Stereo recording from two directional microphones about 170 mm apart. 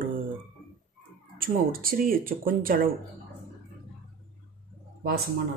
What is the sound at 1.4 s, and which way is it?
Speech, 60° right (ahead or behind).